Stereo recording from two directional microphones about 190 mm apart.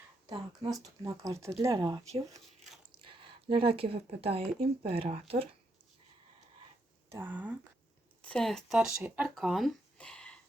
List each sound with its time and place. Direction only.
0.3 s speech: 20° right (ahead or behind)
7.1 s speech: 10° right (ahead or behind)
8.2 s speech: 5° left (ahead or behind)